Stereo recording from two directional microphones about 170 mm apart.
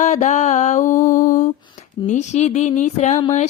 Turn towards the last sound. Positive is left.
turn(degrees=40)  # may be behind; listen again after turning